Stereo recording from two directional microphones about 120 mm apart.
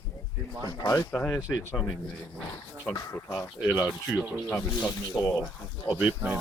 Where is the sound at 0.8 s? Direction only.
30° left (ahead or behind).